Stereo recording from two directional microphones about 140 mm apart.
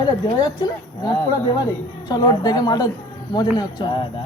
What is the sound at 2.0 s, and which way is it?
A woman's voice, 30° left (ahead or behind).